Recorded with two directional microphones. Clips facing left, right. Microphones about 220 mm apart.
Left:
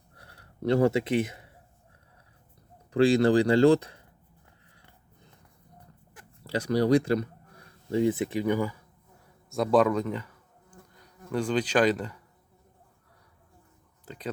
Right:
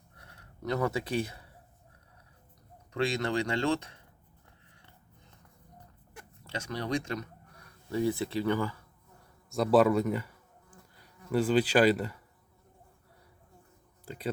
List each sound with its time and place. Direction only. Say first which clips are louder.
0.2 s a sound: left 7 dB; 35° left (ahead or behind)
2.9 s speech: left 10 dB; 35° left (ahead or behind)
6.4 s speech: left 11 dB; 35° left (ahead or behind); by 8.8 s 15° left (ahead or behind)
9.5 s bee: left 1 dB; 5° right (ahead or behind)
11.3 s speech: right 1 dB; 5° right (ahead or behind)